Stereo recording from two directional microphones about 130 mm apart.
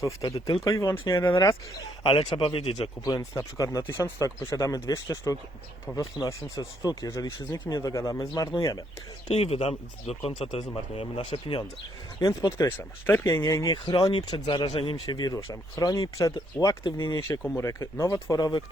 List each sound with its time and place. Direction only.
0.0 s speech: 25° left (ahead or behind)
0.3 s speech: 40° left (ahead or behind)
0.6 s speech: 25° left (ahead or behind)
2.3 s speech: 45° left (ahead or behind)
3.0 s speech: 25° left (ahead or behind)
9.2 s speech: 50° left (ahead or behind)
12.2 s speech: 25° left (ahead or behind)
17.2 s speech: 20° left (ahead or behind)
18.3 s speech: 35° left (ahead or behind)